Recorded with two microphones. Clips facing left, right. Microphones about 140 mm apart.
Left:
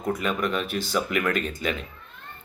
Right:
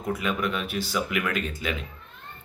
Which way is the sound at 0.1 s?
5° right (ahead or behind).